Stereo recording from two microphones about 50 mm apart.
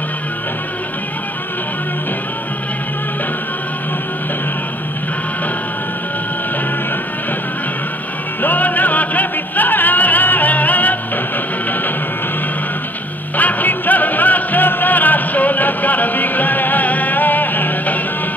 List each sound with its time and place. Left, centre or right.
8.4 s music: left
13.4 s music: left